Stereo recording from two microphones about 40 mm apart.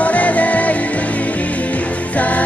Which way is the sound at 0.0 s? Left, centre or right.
Left.